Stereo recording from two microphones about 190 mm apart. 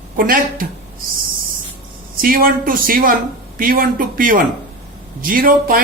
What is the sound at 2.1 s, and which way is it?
A man's voice, 50° right (ahead or behind).